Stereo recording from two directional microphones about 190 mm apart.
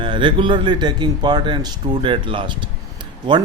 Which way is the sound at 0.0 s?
25° right (ahead or behind).